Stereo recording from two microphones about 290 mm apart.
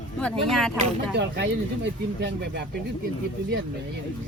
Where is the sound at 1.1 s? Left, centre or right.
Right.